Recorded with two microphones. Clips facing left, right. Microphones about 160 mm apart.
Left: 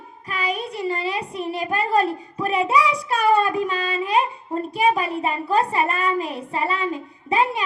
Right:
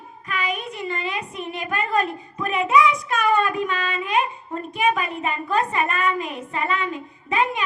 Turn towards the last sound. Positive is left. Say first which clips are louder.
# left 2 dB
turn(degrees=35)  # may be behind; listen again after turning